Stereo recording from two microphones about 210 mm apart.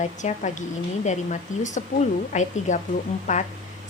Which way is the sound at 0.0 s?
35° left (ahead or behind).